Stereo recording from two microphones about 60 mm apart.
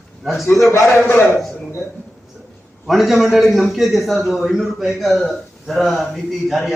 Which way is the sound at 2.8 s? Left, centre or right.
Centre.